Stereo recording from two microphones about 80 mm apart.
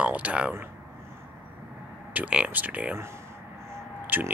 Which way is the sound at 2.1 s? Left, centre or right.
Centre.